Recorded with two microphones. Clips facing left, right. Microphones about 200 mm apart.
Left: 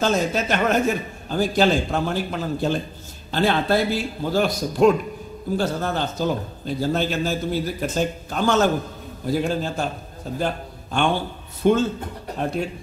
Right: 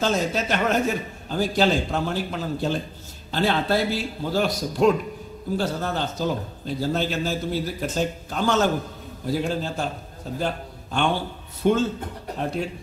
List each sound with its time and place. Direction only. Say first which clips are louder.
0.0 s a man's voice: left 2 dB; 50° left (ahead or behind)